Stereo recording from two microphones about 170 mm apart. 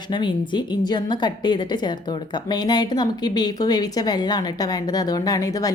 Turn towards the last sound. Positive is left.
turn(degrees=20)  # may be behind; listen again after turning